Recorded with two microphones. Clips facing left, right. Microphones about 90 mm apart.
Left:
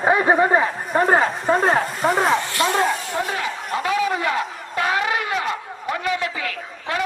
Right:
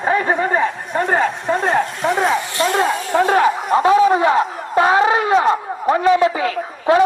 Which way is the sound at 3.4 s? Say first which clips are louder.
Right 10 dB; 40° right (ahead or behind).